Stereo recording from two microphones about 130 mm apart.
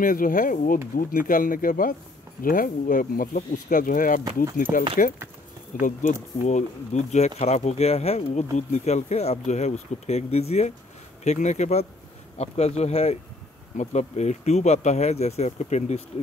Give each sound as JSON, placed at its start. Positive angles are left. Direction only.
{"t": 0.0, "sound": "speech", "side_deg": 90}
{"t": 6.4, "sound": "speech", "side_deg": 65}